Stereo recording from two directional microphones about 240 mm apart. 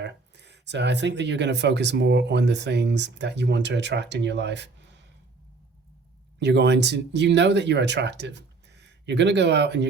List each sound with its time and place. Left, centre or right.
0.0 s speech: right
6.4 s speech: right